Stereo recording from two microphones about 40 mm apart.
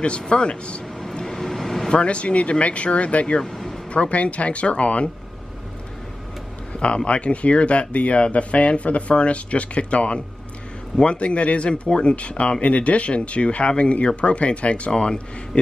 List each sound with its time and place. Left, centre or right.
0.3 s speech: left
1.0 s vehicle: centre
1.9 s speech: left
3.5 s a sound: centre
3.9 s speech: left
6.7 s a sound: left
7.1 s speech: left